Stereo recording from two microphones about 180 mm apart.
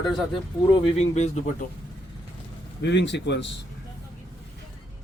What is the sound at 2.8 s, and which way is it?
Speech, 75° left (ahead or behind).